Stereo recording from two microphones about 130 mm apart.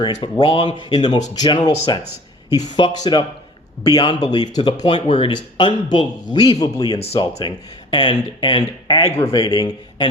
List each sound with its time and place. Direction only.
0.0 s speech: 30° left (ahead or behind)
5.0 s speech: 45° left (ahead or behind)
9.1 s speech: 25° left (ahead or behind)